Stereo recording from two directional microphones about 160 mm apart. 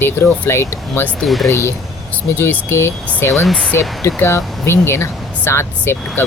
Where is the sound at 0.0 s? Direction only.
15° left (ahead or behind).